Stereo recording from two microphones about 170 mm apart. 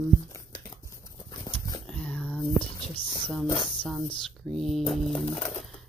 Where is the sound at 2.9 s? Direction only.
30° left (ahead or behind).